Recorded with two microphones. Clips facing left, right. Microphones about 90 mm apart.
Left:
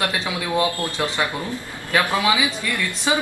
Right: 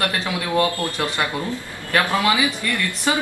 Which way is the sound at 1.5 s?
15° left (ahead or behind).